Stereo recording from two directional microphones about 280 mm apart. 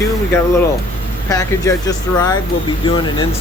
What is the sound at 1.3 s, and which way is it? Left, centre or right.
Speech, centre.